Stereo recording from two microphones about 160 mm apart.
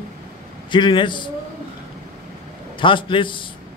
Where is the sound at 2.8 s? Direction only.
30° left (ahead or behind).